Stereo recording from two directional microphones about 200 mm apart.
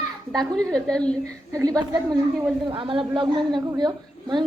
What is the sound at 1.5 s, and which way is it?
Speech, 15° right (ahead or behind).